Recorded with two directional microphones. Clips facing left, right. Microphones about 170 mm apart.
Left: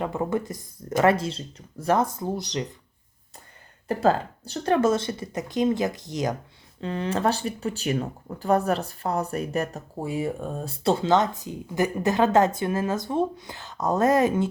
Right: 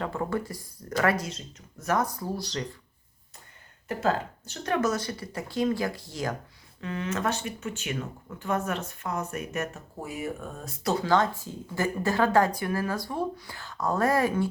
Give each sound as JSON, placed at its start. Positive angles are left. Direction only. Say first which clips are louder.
{"t": 0.0, "sound": "speech", "louder": "left 4 dB", "side_deg": 20}
{"t": 3.8, "sound": "speech", "louder": "left 5 dB", "side_deg": 35}
{"t": 6.8, "sound": "speech", "louder": "left 5 dB", "side_deg": 30}